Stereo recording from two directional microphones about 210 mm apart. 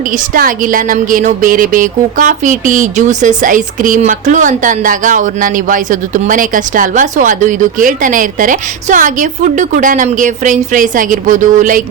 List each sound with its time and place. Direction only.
0.1 s a woman's voice: 40° right (ahead or behind)